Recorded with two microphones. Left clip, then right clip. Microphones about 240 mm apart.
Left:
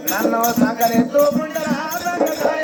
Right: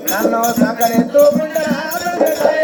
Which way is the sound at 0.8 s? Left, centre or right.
Right.